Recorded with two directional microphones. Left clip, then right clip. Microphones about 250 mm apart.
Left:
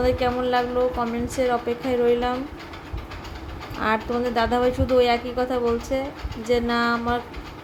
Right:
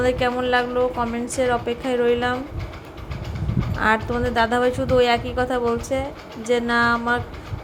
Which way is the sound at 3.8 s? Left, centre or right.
Centre.